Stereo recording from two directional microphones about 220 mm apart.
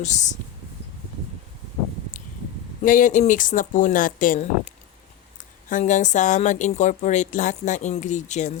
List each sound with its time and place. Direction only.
0.0 s speech: 35° left (ahead or behind)
2.8 s speech: 35° left (ahead or behind)